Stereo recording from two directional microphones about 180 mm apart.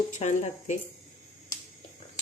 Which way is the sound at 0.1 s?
40° left (ahead or behind).